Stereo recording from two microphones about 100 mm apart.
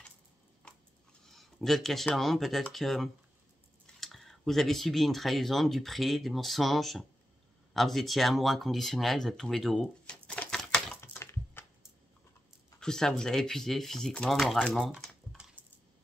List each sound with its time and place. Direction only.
1.2 s speech: 5° left (ahead or behind)
11.1 s a sound: 30° left (ahead or behind)
12.8 s speech: 5° left (ahead or behind)